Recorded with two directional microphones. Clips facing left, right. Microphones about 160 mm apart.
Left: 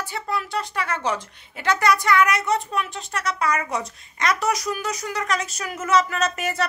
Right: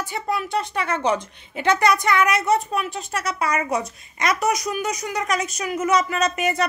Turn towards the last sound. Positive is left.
turn(degrees=-15)  # may be behind; listen again after turning